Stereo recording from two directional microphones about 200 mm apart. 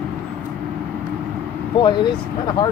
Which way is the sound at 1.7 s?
25° left (ahead or behind).